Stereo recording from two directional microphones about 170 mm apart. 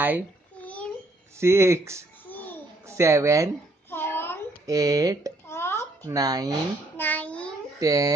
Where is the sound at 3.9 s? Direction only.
15° left (ahead or behind).